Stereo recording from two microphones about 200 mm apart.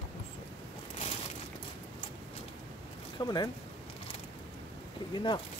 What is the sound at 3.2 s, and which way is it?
Speech, 20° left (ahead or behind).